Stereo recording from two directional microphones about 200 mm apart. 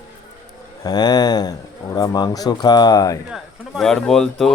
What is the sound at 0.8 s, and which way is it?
Speech, 20° left (ahead or behind).